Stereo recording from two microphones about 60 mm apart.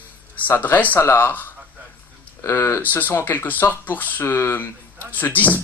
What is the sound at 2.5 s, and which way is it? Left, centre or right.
Speech, left.